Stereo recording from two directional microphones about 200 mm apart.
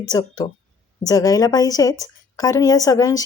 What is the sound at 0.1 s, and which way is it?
A woman's voice, 20° left (ahead or behind).